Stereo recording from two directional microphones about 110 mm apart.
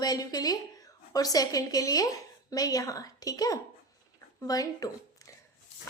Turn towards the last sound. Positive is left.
turn(degrees=35)  # may be behind; listen again after turning